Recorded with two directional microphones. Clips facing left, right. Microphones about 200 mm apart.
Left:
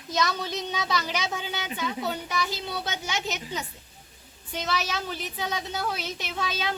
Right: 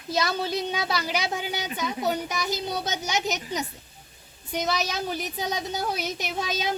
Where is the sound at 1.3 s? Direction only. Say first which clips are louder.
Right 3 dB; 15° right (ahead or behind).